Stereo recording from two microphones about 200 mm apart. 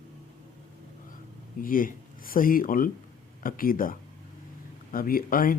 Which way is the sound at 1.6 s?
45° left (ahead or behind).